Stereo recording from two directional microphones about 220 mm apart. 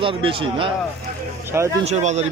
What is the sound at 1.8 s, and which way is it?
Speech, 30° right (ahead or behind).